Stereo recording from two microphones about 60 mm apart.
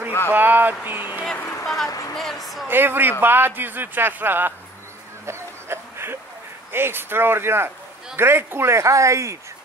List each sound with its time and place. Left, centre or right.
0.3 s speech: right
1.4 s a sound: left
2.1 s a woman's voice: centre
2.7 s a man's voice: right
5.2 s a sound: right
6.7 s a man's voice: right